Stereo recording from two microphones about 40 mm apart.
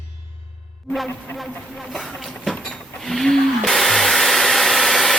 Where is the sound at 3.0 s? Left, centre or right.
Centre.